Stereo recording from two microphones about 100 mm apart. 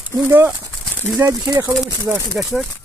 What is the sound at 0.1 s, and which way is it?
Speech, 25° right (ahead or behind).